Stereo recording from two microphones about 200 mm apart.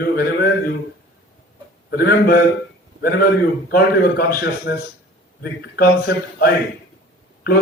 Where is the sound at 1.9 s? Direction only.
50° left (ahead or behind).